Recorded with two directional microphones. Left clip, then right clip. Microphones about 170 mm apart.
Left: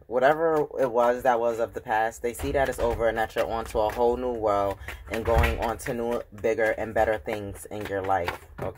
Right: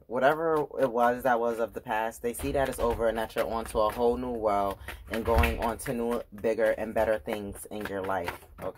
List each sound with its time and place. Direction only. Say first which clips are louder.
0.1 s a man's voice: left 3 dB; 15° right (ahead or behind)